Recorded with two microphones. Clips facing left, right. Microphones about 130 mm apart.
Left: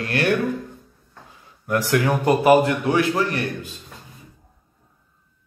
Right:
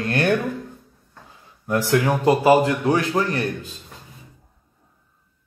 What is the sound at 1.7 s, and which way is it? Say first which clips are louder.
A man's voice: right 1 dB; 25° right (ahead or behind).